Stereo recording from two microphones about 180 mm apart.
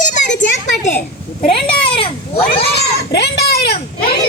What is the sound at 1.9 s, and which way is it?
Children playing, 30° left (ahead or behind).